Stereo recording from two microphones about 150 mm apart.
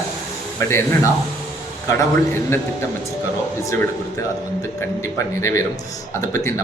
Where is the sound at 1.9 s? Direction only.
15° left (ahead or behind).